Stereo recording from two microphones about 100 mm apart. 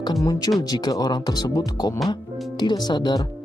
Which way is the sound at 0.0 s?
40° left (ahead or behind).